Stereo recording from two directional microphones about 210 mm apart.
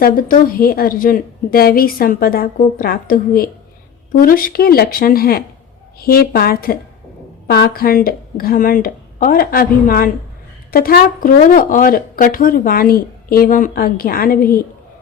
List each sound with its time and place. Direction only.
0.0 s speech: 45° left (ahead or behind)